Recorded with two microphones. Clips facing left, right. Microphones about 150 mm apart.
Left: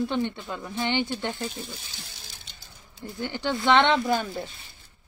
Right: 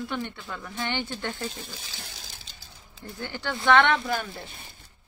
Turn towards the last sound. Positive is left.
turn(degrees=25)  # may be behind; listen again after turning